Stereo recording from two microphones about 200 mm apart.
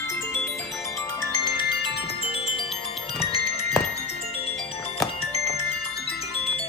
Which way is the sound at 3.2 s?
30° left (ahead or behind).